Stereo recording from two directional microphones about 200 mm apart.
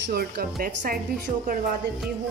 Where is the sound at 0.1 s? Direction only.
50° right (ahead or behind).